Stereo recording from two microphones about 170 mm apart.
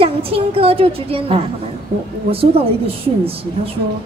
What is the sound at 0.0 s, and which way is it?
Speech, 35° right (ahead or behind).